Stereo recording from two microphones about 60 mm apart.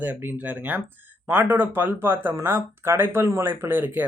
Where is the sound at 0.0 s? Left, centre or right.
Right.